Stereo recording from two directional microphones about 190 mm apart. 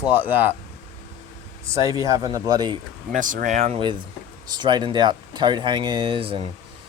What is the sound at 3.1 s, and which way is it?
Speech, 45° right (ahead or behind).